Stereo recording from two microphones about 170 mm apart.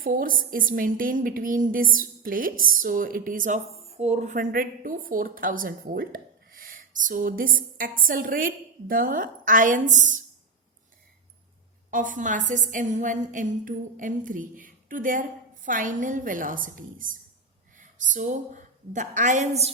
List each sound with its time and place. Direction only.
0.0 s a woman's voice: 55° right (ahead or behind)
11.9 s a woman's voice: 50° right (ahead or behind)